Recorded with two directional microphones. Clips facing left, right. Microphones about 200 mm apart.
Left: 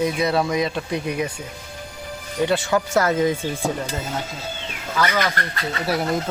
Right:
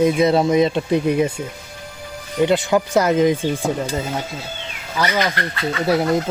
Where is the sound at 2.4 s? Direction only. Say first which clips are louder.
Right 4 dB; 20° right (ahead or behind).